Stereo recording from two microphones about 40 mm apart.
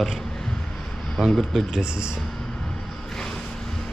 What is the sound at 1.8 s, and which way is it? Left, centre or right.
Speech, right.